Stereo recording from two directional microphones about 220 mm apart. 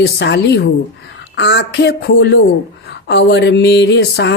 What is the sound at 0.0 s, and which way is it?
Speech, 50° left (ahead or behind).